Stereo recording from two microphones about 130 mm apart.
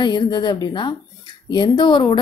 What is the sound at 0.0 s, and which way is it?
A woman's voice, 35° left (ahead or behind).